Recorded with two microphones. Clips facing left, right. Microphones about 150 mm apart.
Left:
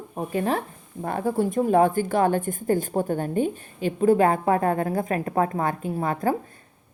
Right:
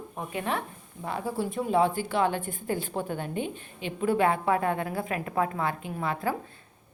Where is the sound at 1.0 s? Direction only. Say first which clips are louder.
Left 7 dB; 50° left (ahead or behind).